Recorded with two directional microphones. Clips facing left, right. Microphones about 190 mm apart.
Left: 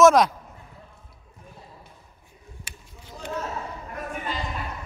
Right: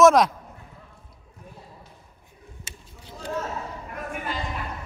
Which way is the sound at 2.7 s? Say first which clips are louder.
Right 1 dB; 25° right (ahead or behind).